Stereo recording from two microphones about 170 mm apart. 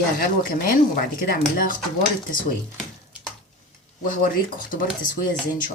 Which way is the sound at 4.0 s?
55° left (ahead or behind).